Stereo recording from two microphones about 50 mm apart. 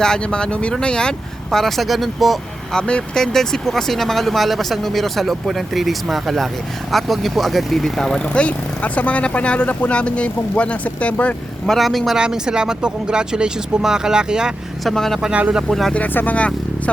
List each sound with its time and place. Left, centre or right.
0.0 s speech: centre
2.7 s speech: centre
8.2 s speech: left
11.6 s speech: centre
12.1 s speech: centre
14.8 s speech: centre
15.3 s speech: right
16.1 s speech: left